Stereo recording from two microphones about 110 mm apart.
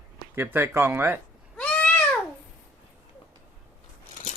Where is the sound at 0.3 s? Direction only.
20° right (ahead or behind).